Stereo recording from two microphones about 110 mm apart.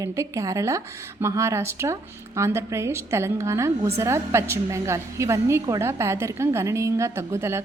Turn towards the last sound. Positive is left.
turn(degrees=-25)  # may be behind; listen again after turning